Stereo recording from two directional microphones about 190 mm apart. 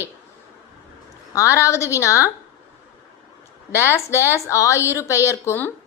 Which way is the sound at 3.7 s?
15° left (ahead or behind).